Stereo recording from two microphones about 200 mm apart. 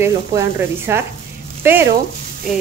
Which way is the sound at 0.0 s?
10° right (ahead or behind).